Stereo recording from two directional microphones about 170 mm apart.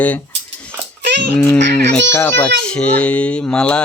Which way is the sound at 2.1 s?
10° left (ahead or behind).